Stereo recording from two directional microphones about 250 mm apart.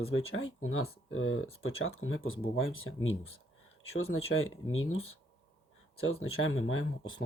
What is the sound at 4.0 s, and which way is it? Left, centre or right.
Speech, left.